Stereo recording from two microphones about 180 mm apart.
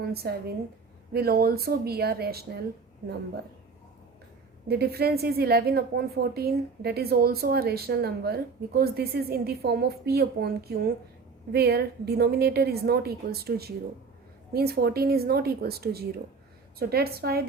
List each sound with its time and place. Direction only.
0.0 s a woman's voice: 60° right (ahead or behind)
4.7 s a woman's voice: 60° right (ahead or behind)